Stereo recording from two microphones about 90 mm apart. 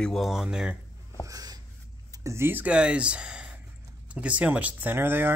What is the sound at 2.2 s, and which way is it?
Speech, 30° right (ahead or behind).